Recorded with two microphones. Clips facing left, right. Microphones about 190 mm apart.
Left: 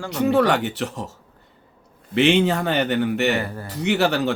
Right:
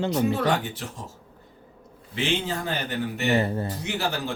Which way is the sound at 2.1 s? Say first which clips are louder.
Left 10 dB; 70° left (ahead or behind).